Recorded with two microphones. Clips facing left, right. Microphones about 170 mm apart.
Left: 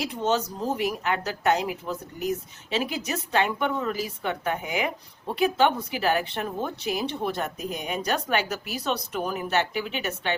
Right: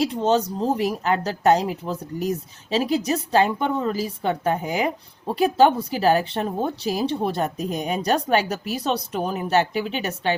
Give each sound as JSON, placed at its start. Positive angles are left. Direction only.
{"t": 0.0, "sound": "speech", "side_deg": -30}